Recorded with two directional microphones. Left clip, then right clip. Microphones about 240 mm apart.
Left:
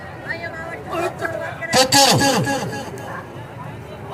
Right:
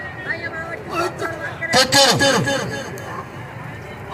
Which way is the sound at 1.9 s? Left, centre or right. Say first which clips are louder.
Even; left.